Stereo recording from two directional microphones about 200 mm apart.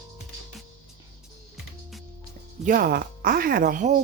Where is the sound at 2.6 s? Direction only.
45° right (ahead or behind).